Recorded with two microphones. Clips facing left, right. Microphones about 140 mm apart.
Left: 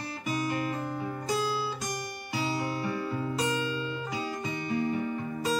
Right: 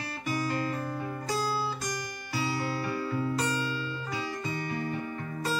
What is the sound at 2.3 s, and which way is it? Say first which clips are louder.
Music: even; 20° left (ahead or behind).